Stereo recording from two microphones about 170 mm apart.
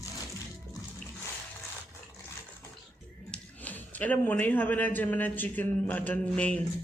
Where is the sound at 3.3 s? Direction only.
10° left (ahead or behind).